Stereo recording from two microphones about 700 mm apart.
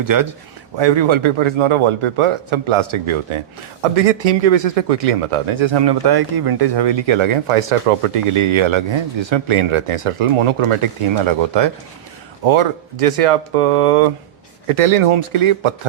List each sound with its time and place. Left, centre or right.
0.0 s speech: right
0.8 s a man's voice: right
3.9 s a man's voice: right